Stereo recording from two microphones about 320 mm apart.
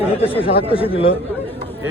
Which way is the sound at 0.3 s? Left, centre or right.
Centre.